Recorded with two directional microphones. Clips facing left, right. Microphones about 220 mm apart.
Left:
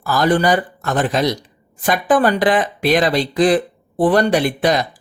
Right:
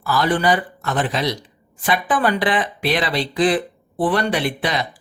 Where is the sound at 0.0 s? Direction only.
45° left (ahead or behind).